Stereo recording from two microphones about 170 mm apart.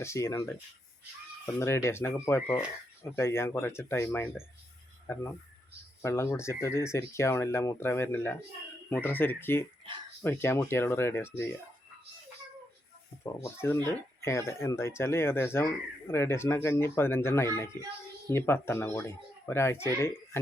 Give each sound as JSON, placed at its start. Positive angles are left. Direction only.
{"t": 0.0, "sound": "speech", "side_deg": 15}
{"t": 13.2, "sound": "speech", "side_deg": 15}